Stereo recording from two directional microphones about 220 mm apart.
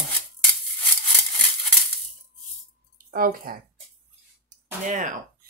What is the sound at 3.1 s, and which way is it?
Speech, 40° right (ahead or behind).